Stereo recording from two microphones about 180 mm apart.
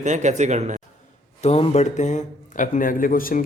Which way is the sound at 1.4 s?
35° left (ahead or behind).